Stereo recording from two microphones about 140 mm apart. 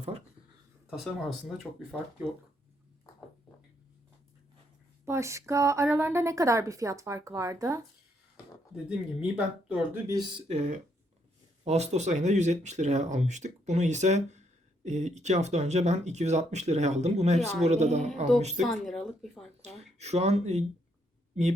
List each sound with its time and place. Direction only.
0.9 s speech: centre (ahead or behind)
5.0 s a woman's voice: 20° right (ahead or behind)
8.7 s speech: 5° right (ahead or behind)
10.1 s a woman's voice: 30° right (ahead or behind)
10.5 s speech: 55° right (ahead or behind)
18.6 s speech: centre (ahead or behind)
19.6 s speech: 50° right (ahead or behind)